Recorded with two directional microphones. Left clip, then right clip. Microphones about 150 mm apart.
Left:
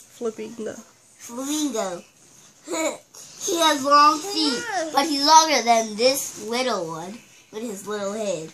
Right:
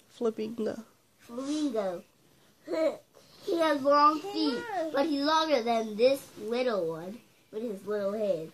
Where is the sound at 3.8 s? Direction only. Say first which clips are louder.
Left 7 dB; 10° left (ahead or behind).